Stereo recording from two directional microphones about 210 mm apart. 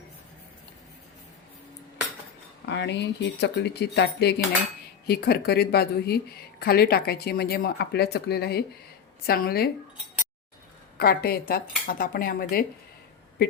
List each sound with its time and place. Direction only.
2.6 s speech: 55° left (ahead or behind)
10.9 s speech: 45° left (ahead or behind)